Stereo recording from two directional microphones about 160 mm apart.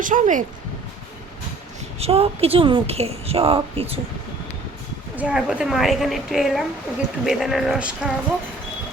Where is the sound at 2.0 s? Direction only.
40° right (ahead or behind).